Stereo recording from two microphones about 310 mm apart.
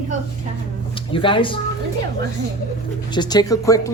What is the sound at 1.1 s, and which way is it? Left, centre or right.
Speech, centre.